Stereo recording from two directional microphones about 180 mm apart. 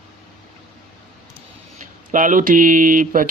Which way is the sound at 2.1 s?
45° right (ahead or behind).